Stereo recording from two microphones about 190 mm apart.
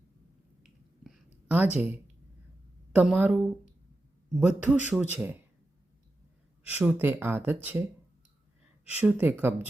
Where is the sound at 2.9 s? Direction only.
10° right (ahead or behind).